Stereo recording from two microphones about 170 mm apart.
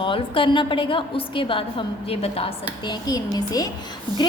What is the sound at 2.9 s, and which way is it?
Speech, 25° left (ahead or behind).